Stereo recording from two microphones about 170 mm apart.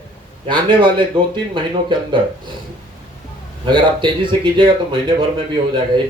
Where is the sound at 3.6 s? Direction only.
25° right (ahead or behind).